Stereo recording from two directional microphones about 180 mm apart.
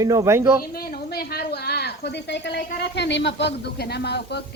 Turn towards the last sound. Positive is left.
turn(degrees=65)  # may be behind; listen again after turning